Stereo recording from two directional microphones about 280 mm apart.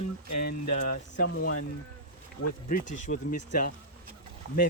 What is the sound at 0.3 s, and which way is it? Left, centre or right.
Speech, left.